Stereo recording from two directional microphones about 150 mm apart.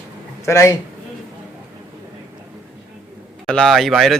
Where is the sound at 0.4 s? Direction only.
20° left (ahead or behind).